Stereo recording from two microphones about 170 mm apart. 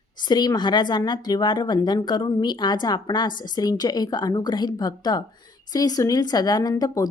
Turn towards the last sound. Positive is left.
turn(degrees=20)  # may be behind; listen again after turning